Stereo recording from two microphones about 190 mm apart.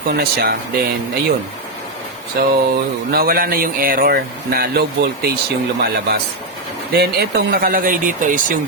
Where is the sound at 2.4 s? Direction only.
60° right (ahead or behind).